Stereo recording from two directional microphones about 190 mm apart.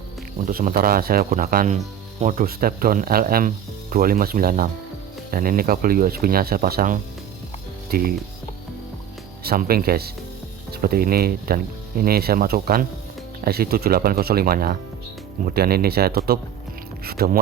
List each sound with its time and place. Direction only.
0.4 s speech: 45° right (ahead or behind)
9.4 s speech: 55° right (ahead or behind)
17.0 s music: 55° right (ahead or behind)